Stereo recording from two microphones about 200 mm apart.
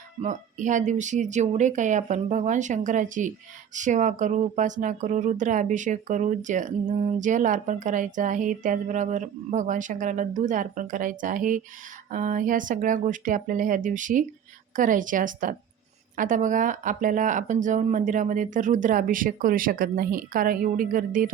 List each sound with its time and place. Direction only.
0.2 s speech: 35° right (ahead or behind)